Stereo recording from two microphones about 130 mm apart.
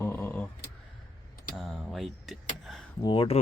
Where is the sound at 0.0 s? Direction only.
20° left (ahead or behind).